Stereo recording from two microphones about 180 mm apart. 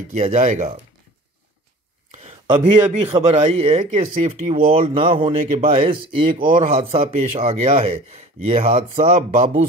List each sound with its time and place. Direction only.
0.1 s speech: 40° right (ahead or behind)
2.0 s a sound: 45° right (ahead or behind)
2.5 s speech: 30° right (ahead or behind)